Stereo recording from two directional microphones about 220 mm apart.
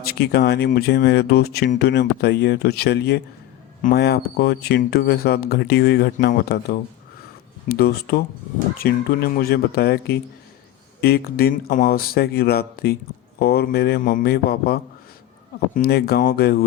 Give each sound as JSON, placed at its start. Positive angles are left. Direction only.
{"t": 0.0, "sound": "speech", "side_deg": 45}